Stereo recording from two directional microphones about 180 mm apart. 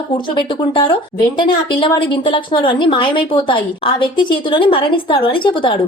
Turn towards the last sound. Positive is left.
turn(degrees=30)  # may be behind; listen again after turning